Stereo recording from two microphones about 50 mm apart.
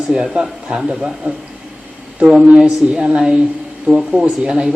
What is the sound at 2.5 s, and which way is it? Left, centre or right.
A man's voice, centre.